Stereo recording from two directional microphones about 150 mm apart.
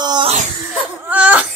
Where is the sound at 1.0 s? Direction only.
10° right (ahead or behind).